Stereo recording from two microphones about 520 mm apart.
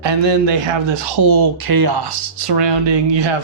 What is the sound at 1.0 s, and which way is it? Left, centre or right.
Speech, right.